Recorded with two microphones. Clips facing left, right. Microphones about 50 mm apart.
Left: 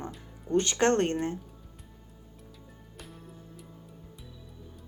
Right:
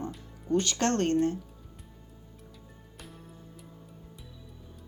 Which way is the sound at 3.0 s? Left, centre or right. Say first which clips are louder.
Left 1 dB; centre.